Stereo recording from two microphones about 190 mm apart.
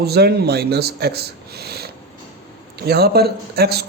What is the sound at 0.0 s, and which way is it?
A man's voice, 55° right (ahead or behind).